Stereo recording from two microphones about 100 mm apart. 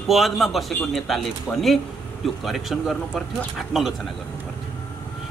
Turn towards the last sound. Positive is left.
turn(degrees=-5)  # may be behind; listen again after turning